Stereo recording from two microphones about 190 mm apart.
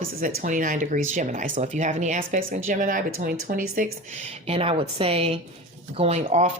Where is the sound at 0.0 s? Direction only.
50° right (ahead or behind).